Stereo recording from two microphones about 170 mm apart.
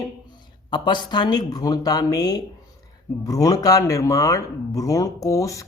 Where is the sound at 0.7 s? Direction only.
25° left (ahead or behind).